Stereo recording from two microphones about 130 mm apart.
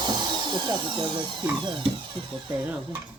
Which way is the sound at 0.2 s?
35° right (ahead or behind).